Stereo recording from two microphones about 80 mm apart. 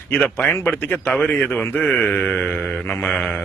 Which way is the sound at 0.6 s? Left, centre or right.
Left.